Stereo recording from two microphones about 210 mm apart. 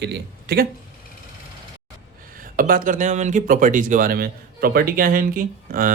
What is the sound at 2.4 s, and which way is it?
Speech, 40° right (ahead or behind).